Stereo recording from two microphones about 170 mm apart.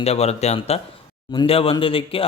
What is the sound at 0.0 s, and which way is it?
Speech, 40° left (ahead or behind).